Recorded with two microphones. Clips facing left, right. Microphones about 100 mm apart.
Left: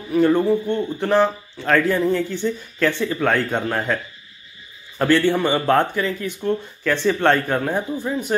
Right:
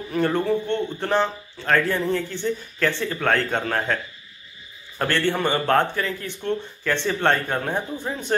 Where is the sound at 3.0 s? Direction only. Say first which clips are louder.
Left 3 dB; 15° left (ahead or behind).